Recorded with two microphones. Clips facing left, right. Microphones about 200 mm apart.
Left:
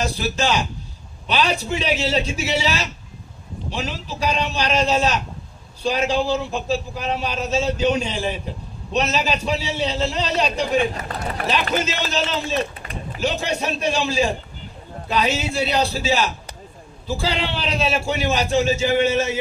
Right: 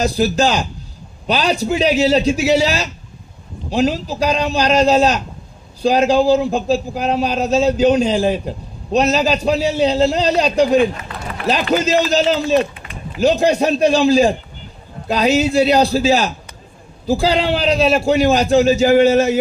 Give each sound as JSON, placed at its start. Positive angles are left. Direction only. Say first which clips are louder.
{"t": 0.0, "sound": "a man's voice", "louder": "right 7 dB", "side_deg": -40}
{"t": 11.0, "sound": "a sound", "louder": "left 1 dB", "side_deg": 40}
{"t": 11.7, "sound": "a man's voice", "louder": "right 8 dB", "side_deg": -35}